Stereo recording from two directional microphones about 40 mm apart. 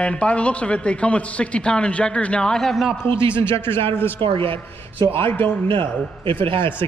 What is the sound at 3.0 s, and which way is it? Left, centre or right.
Speech, left.